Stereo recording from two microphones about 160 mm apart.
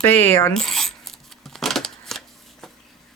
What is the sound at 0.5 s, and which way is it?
Coin, centre (ahead or behind).